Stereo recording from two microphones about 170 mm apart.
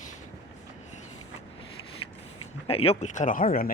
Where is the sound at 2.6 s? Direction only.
35° left (ahead or behind); by 3.7 s 55° left (ahead or behind).